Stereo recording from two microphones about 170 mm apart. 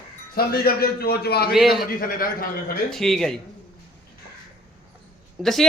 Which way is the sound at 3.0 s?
Centre (ahead or behind).